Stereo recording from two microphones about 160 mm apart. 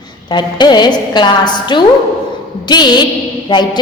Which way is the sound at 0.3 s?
25° left (ahead or behind).